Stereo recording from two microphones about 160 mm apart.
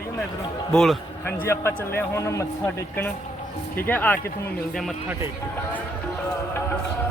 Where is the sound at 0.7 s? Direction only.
Centre (ahead or behind).